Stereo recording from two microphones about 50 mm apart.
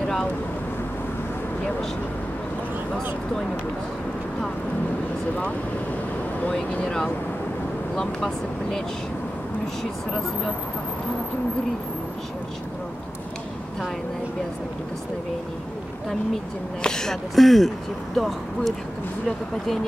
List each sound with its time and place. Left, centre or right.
0.0 s vehicle: centre
6.7 s speech: left
7.9 s speech: centre
16.8 s speech: centre